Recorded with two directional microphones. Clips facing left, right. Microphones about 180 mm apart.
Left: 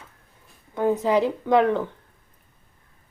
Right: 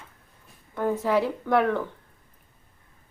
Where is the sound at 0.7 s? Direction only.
15° left (ahead or behind).